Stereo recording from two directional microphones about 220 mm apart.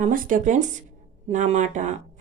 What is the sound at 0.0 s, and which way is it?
A woman's voice, 35° right (ahead or behind).